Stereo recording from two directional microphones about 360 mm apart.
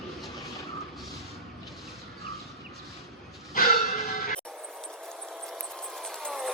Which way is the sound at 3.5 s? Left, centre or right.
Left.